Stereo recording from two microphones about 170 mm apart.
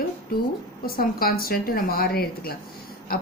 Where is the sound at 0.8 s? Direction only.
60° left (ahead or behind).